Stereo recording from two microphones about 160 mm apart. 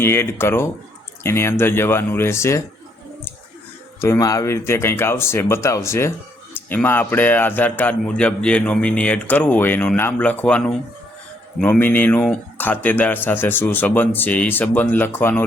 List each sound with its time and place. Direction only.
0.0 s speech: 15° left (ahead or behind)
4.0 s speech: 20° left (ahead or behind)